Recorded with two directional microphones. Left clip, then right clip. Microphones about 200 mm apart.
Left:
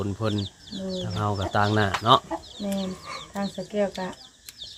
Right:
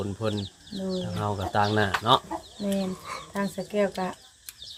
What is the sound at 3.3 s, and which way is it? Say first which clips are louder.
Speech: right 1 dB; 55° right (ahead or behind).